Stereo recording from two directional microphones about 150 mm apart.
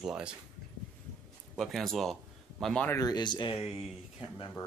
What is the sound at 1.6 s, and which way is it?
Speech, centre (ahead or behind).